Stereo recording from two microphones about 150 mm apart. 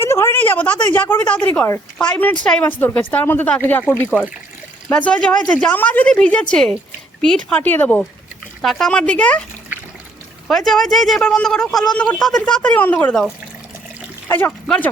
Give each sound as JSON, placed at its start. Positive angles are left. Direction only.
{"t": 0.0, "sound": "a woman's voice", "side_deg": 15}
{"t": 10.7, "sound": "speech", "side_deg": 0}
{"t": 14.3, "sound": "speech", "side_deg": 15}